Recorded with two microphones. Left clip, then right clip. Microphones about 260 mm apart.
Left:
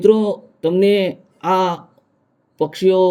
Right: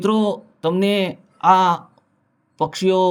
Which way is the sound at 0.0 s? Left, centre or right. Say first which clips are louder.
Left 6 dB; right.